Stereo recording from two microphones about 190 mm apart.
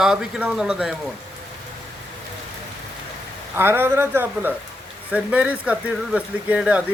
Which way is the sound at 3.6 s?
10° right (ahead or behind).